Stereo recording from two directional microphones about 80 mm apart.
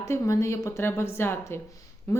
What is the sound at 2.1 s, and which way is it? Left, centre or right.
Speech, left.